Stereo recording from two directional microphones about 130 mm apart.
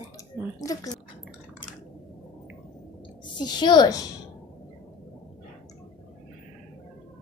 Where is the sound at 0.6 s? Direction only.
25° left (ahead or behind).